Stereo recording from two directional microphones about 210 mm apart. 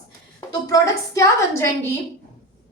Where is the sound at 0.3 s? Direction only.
15° left (ahead or behind).